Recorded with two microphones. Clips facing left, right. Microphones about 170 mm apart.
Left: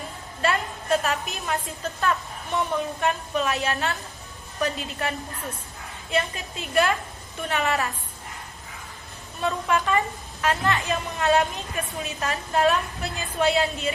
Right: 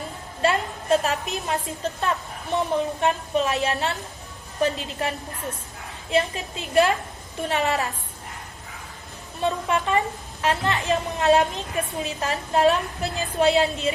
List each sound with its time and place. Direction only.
0.4 s a woman's voice: 30° right (ahead or behind)
4.9 s a woman's voice: 25° right (ahead or behind)
9.4 s a woman's voice: 25° right (ahead or behind)